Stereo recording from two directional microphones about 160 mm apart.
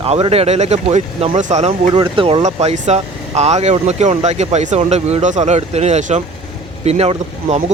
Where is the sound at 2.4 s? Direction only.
45° right (ahead or behind).